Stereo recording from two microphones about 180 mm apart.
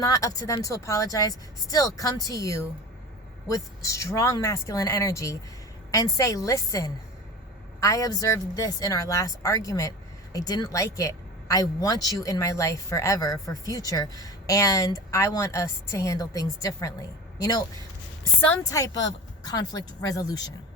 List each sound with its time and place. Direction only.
0.0 s a woman's voice: 20° left (ahead or behind)